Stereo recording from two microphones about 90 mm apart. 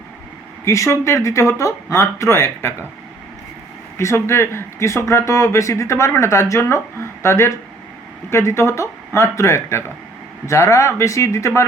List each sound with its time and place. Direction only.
0.6 s speech: 30° left (ahead or behind)
3.9 s speech: 30° left (ahead or behind)